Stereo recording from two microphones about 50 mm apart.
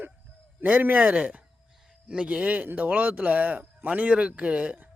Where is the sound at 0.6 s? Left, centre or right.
Right.